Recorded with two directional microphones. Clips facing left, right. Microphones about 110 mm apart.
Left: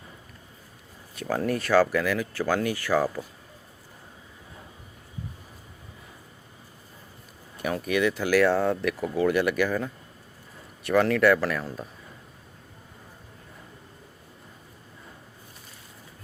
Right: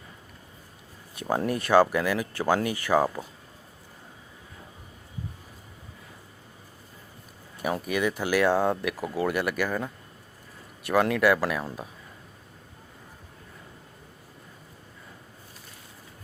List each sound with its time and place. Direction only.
1.2 s speech: 15° right (ahead or behind)
7.6 s speech: 10° right (ahead or behind)